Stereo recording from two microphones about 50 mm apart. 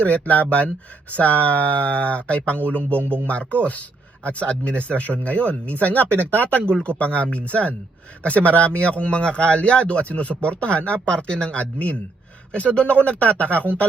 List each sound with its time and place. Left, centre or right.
0.0 s speech: left
3.0 s speech: right
3.2 s speech: left
6.1 s speech: right
6.8 s speech: left